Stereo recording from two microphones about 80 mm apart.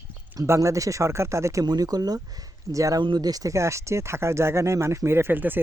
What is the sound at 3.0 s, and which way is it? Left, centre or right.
Speech, right.